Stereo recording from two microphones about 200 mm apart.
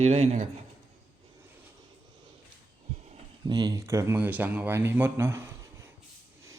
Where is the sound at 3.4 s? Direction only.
20° right (ahead or behind).